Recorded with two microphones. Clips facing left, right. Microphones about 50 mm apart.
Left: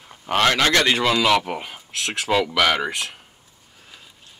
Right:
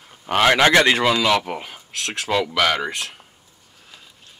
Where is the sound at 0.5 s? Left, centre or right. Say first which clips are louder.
Right 5 dB; right.